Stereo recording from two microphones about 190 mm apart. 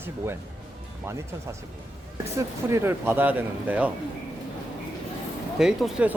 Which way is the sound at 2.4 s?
15° right (ahead or behind).